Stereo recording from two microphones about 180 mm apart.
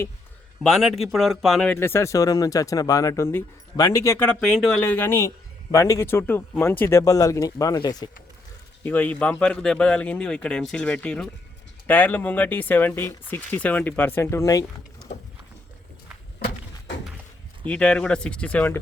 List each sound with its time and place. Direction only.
0.6 s speech: centre (ahead or behind); by 8.1 s 20° left (ahead or behind)
8.8 s speech: 10° left (ahead or behind)
17.7 s speech: 5° left (ahead or behind)